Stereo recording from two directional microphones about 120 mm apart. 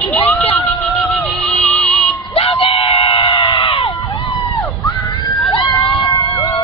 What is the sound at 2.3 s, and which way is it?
Screaming, 50° left (ahead or behind).